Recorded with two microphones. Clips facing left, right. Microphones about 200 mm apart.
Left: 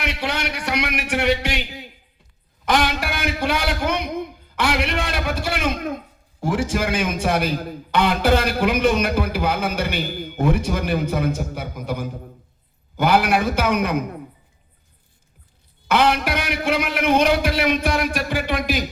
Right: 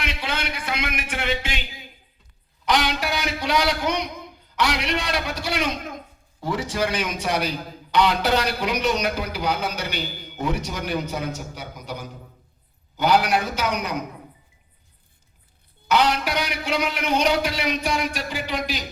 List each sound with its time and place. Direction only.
0.0 s a man's voice: 65° left (ahead or behind)
2.6 s a man's voice: 55° left (ahead or behind)
15.9 s a man's voice: 55° left (ahead or behind)